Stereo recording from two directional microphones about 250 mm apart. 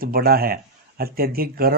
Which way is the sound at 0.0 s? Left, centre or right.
Right.